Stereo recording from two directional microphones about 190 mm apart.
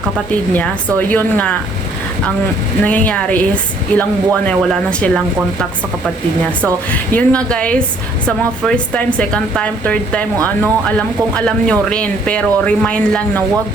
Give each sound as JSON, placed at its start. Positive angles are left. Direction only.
{"t": 0.3, "sound": "speech", "side_deg": 10}
{"t": 2.8, "sound": "speech", "side_deg": 10}